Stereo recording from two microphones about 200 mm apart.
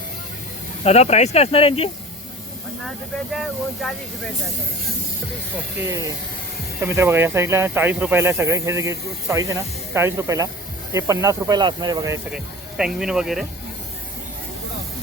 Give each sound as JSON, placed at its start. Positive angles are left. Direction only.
{"t": 0.9, "sound": "speech", "side_deg": 30}
{"t": 3.3, "sound": "speech", "side_deg": 0}
{"t": 6.8, "sound": "speech", "side_deg": -15}
{"t": 12.3, "sound": "speech", "side_deg": -5}